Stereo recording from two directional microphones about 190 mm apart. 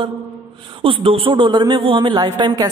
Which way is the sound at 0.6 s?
25° right (ahead or behind).